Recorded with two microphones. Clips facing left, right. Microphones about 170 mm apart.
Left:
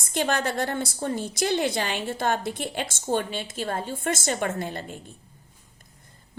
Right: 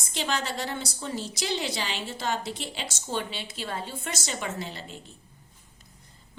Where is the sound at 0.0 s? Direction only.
55° left (ahead or behind).